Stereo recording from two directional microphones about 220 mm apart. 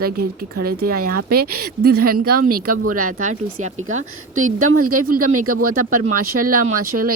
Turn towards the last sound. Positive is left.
turn(degrees=-90)